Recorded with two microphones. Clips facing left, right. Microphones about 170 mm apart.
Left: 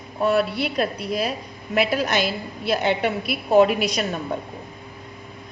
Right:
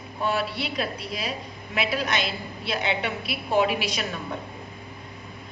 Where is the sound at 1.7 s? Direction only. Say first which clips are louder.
Left 6 dB; 50° left (ahead or behind).